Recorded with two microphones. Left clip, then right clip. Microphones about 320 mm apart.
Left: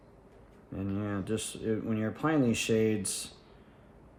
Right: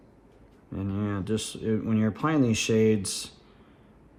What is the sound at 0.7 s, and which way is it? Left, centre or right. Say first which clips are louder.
Speech: right 3 dB; centre.